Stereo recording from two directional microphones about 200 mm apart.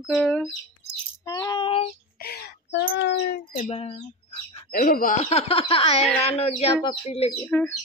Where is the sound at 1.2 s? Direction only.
15° left (ahead or behind).